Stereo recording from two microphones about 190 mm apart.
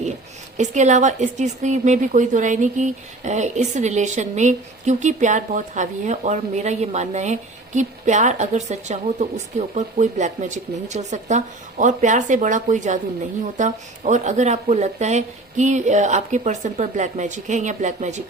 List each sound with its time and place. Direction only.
0.5 s a woman's voice: 40° right (ahead or behind)